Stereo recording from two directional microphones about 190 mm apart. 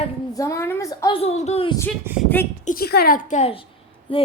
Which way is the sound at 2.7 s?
55° left (ahead or behind).